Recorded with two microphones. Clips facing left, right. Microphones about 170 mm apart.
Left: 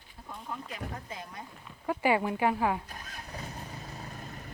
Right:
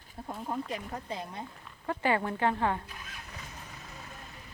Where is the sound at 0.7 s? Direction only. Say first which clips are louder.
Right 3 dB; 30° right (ahead or behind).